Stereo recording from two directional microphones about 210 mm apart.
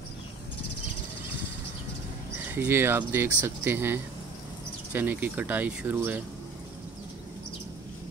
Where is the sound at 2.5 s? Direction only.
10° right (ahead or behind).